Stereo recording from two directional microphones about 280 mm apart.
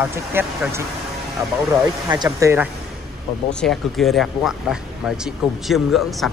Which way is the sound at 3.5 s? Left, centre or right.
Centre.